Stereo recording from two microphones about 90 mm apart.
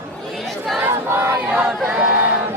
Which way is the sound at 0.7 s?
25° right (ahead or behind).